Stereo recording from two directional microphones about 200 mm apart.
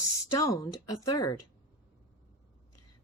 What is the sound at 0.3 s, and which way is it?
Speech, 15° left (ahead or behind).